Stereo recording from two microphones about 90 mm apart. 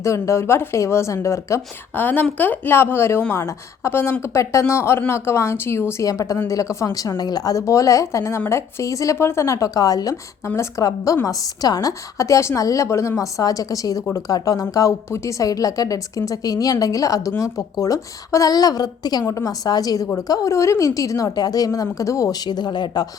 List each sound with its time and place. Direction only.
0.0 s a woman's voice: 35° left (ahead or behind)
2.0 s a woman's voice: 20° left (ahead or behind); by 23.0 s 55° left (ahead or behind)